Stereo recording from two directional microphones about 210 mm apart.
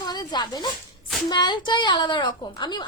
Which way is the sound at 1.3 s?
20° left (ahead or behind).